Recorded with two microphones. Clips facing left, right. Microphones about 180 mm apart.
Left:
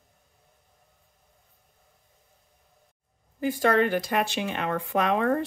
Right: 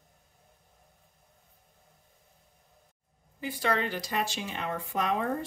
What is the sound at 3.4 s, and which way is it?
Speech, 50° left (ahead or behind).